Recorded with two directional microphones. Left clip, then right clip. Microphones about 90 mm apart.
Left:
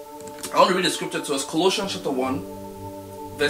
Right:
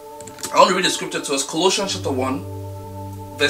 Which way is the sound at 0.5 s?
5° right (ahead or behind).